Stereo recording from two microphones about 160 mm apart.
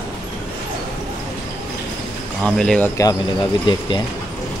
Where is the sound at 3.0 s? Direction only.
25° left (ahead or behind).